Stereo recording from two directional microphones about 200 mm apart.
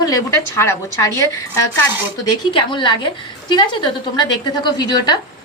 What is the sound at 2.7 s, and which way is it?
A woman's voice, 25° left (ahead or behind).